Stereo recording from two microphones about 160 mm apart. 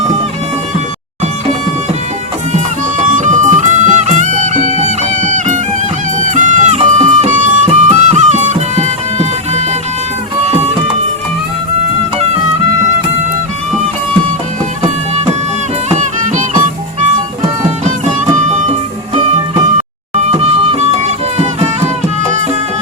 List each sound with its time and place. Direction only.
3.0 s music: 50° right (ahead or behind)
14.8 s music: 45° right (ahead or behind)
18.5 s music: 40° right (ahead or behind)